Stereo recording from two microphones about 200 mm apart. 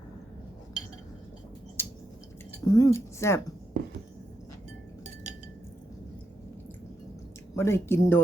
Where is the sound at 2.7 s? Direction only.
15° left (ahead or behind).